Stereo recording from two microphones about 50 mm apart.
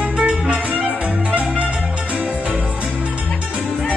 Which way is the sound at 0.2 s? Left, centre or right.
Right.